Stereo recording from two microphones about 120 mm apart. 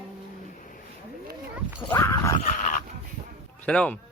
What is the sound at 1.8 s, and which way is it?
Speech, 25° left (ahead or behind).